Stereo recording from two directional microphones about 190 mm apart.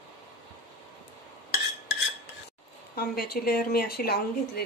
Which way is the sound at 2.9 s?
55° left (ahead or behind).